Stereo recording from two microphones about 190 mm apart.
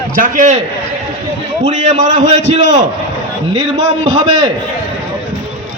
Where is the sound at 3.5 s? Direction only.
20° right (ahead or behind).